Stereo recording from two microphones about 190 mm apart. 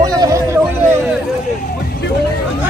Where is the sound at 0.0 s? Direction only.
20° right (ahead or behind).